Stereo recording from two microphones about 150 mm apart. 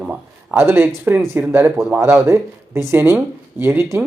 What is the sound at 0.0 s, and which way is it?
Speech, 10° right (ahead or behind).